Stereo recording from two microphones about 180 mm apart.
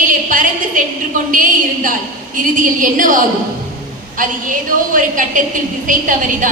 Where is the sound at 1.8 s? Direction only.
50° right (ahead or behind).